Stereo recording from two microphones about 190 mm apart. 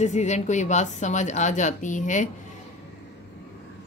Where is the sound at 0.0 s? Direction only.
35° left (ahead or behind).